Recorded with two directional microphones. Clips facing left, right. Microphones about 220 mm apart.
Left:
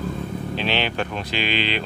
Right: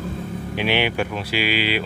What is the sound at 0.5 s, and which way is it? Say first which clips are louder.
Speech: right 4 dB; 10° right (ahead or behind).